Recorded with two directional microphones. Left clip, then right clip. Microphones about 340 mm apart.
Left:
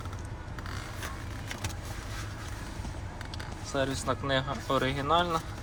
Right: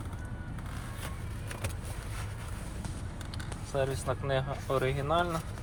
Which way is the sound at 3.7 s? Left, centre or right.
Centre.